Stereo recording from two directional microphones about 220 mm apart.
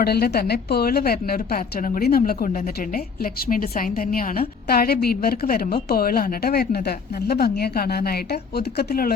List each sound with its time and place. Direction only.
0.0 s a woman's voice: 45° left (ahead or behind)